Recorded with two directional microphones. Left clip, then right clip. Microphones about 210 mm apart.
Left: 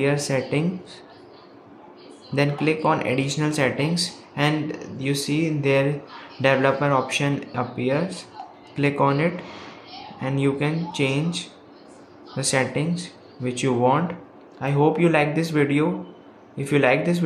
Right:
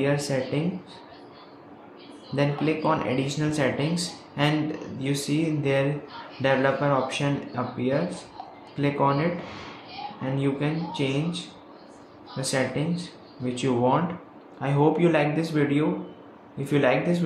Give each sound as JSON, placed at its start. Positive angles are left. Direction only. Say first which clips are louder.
{"t": 0.0, "sound": "speech", "louder": "left 3 dB", "side_deg": 25}
{"t": 2.3, "sound": "speech", "louder": "left 3 dB", "side_deg": 25}